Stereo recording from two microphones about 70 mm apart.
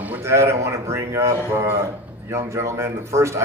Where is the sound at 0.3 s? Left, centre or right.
Right.